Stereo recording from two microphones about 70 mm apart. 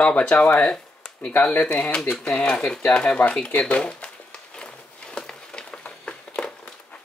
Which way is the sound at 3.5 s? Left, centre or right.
Left.